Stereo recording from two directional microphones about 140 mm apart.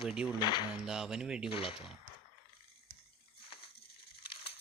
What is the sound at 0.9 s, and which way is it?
Speech, 5° right (ahead or behind).